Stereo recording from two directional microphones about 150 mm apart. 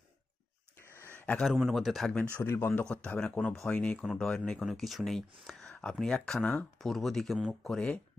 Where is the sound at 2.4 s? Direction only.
15° left (ahead or behind).